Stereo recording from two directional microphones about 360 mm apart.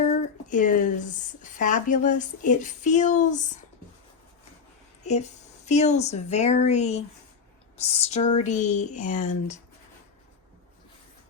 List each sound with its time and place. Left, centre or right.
0.4 s speech: left
5.0 s speech: centre